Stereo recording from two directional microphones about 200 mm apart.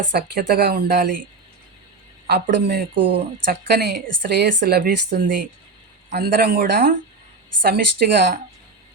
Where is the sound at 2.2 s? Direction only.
50° right (ahead or behind).